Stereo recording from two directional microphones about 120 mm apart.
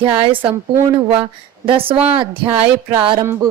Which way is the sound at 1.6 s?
50° right (ahead or behind).